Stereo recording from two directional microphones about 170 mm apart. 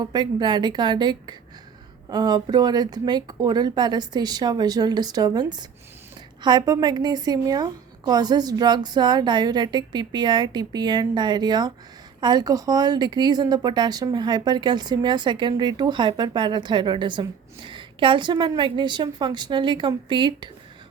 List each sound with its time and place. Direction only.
0.0 s speech: 25° right (ahead or behind)